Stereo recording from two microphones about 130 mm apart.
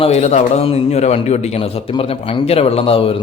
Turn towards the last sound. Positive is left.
turn(degrees=45)  # may be behind; listen again after turning